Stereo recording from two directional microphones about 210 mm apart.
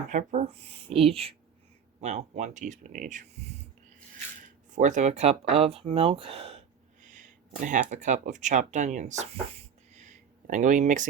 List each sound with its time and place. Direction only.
0.1 s speech: 35° right (ahead or behind)
4.7 s speech: 35° right (ahead or behind)